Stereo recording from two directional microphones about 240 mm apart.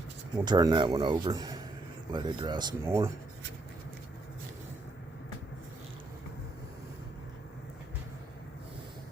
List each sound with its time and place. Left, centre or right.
0.4 s speech: centre